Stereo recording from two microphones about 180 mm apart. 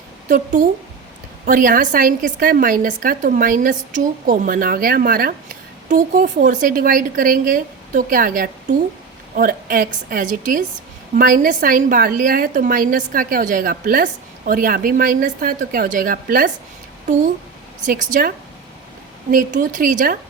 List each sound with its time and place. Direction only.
0.3 s a woman's voice: 45° right (ahead or behind)
17.7 s a woman's voice: 45° right (ahead or behind)